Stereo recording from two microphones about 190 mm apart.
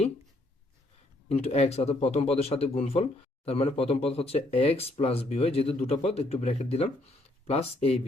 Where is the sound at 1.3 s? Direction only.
35° left (ahead or behind).